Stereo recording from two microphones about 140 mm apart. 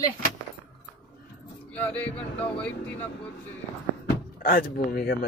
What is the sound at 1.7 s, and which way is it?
Speech, 10° left (ahead or behind).